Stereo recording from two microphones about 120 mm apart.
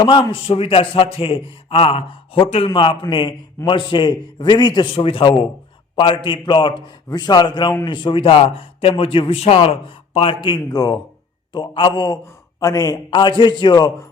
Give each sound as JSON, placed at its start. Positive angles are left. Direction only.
{"t": 0.0, "sound": "a man's voice", "side_deg": 45}
{"t": 4.9, "sound": "a man's voice", "side_deg": 50}
{"t": 10.4, "sound": "a man's voice", "side_deg": 35}
{"t": 13.1, "sound": "a man's voice", "side_deg": 40}